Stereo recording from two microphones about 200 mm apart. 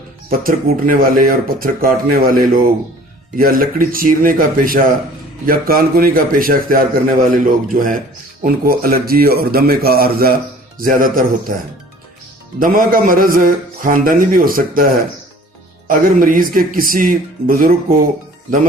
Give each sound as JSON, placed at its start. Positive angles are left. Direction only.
{"t": 0.3, "sound": "a man's voice", "side_deg": -45}
{"t": 12.5, "sound": "a man's voice", "side_deg": -45}